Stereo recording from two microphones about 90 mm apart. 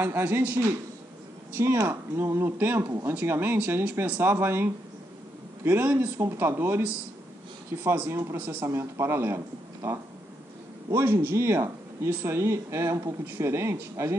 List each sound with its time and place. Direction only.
0.0 s speech: 25° right (ahead or behind)
8.6 s speech: 30° right (ahead or behind)
10.9 s speech: 30° right (ahead or behind)